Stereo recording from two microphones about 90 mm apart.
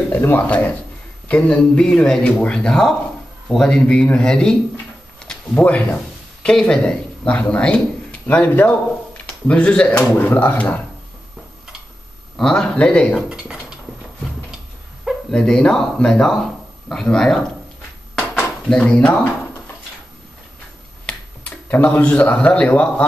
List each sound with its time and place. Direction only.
0.1 s speech: 20° left (ahead or behind)
5.2 s a sound: 10° left (ahead or behind)
5.6 s speech: 15° left (ahead or behind)
12.4 s speech: 10° left (ahead or behind)
13.3 s a sound: 10° right (ahead or behind)
15.3 s speech: 10° left (ahead or behind)
18.3 s drawer open or close: 10° left (ahead or behind)
21.0 s finger snapping: 10° left (ahead or behind)
21.6 s speech: 20° left (ahead or behind)